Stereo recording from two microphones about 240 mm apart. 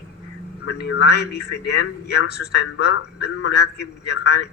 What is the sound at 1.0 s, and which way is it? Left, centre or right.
A man's voice, left.